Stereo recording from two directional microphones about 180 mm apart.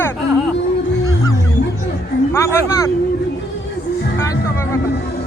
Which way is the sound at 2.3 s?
15° left (ahead or behind).